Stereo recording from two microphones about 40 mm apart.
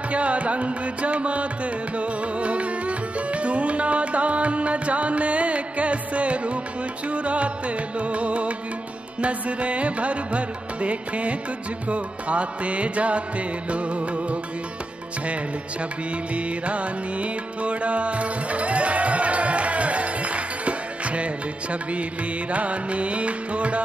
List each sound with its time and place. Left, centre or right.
0.1 s music: right
16.3 s music: right
22.5 s music: right